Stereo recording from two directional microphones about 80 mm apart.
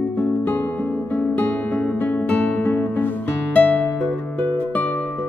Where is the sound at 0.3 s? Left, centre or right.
Left.